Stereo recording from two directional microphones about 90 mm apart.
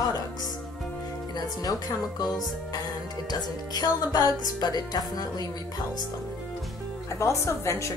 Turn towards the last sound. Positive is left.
turn(degrees=35)  # may be behind; listen again after turning